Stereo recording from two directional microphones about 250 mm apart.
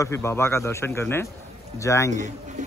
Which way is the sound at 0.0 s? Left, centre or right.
Centre.